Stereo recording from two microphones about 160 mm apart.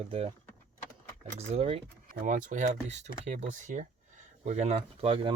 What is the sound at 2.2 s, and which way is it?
Speech, 55° right (ahead or behind).